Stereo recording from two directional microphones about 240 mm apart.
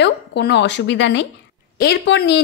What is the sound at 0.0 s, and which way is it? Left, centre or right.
A woman's voice, left.